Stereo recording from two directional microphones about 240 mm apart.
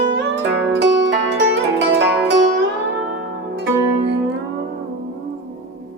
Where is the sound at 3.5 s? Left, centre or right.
Right.